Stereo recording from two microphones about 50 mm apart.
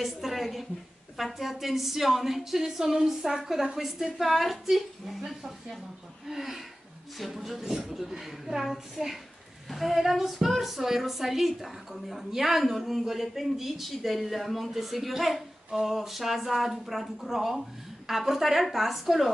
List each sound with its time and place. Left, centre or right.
0.0 s a woman's voice: centre